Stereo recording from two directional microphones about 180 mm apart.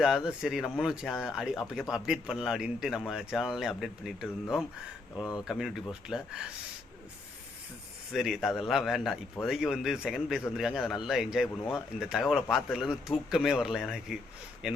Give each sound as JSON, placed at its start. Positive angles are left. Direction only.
{"t": 0.0, "sound": "speech", "side_deg": -5}
{"t": 5.2, "sound": "speech", "side_deg": 20}
{"t": 5.5, "sound": "speech", "side_deg": 0}
{"t": 8.1, "sound": "speech", "side_deg": 0}